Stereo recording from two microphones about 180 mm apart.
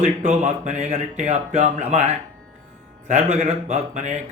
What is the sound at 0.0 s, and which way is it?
Speech, 40° right (ahead or behind).